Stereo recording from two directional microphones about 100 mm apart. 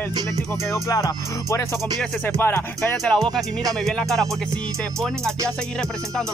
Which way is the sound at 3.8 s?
5° left (ahead or behind).